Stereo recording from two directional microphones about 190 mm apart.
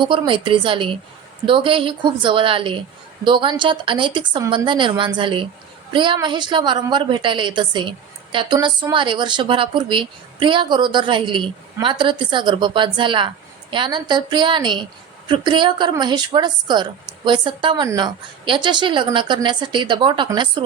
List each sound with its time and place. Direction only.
0.0 s a woman's voice: 25° right (ahead or behind)